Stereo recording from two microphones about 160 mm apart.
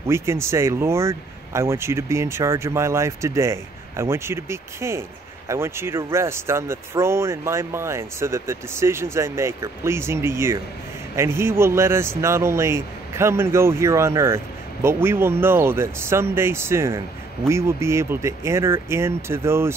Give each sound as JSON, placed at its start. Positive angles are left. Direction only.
{"t": 0.0, "sound": "speech", "side_deg": -15}